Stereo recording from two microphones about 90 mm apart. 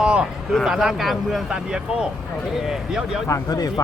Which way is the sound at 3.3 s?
45° left (ahead or behind).